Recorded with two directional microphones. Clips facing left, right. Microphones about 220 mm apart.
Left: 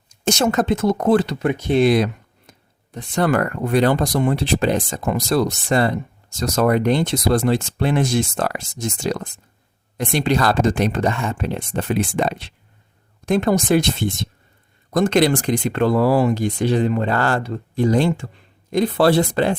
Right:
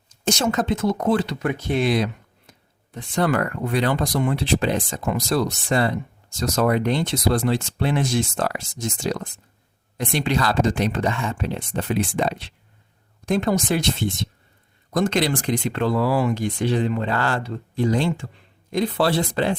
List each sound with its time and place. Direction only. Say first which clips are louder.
0.3 s speech: left 3 dB; 50° left (ahead or behind)
1.4 s speech: left 5 dB; 20° left (ahead or behind)
1.8 s speech: left 6 dB; 50° left (ahead or behind)